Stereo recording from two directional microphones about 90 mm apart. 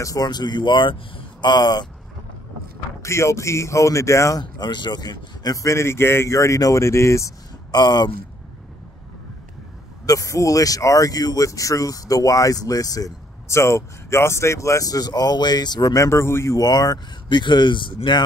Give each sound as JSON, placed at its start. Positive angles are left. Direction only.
{"t": 0.0, "sound": "speech", "side_deg": 45}
{"t": 1.5, "sound": "speech", "side_deg": 50}
{"t": 3.0, "sound": "speech", "side_deg": 30}
{"t": 4.4, "sound": "speech", "side_deg": 55}
{"t": 7.7, "sound": "speech", "side_deg": 50}
{"t": 10.0, "sound": "speech", "side_deg": 40}
{"t": 16.5, "sound": "speech", "side_deg": 45}